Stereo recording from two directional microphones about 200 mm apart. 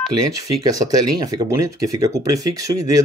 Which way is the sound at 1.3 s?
15° right (ahead or behind).